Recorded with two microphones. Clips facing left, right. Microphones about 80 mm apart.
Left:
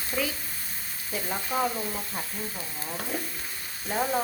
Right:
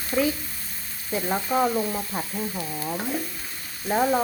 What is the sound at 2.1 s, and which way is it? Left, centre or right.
Speech, right.